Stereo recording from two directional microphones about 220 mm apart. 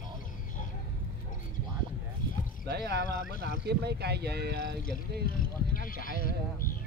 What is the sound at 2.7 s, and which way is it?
Speech, 50° right (ahead or behind).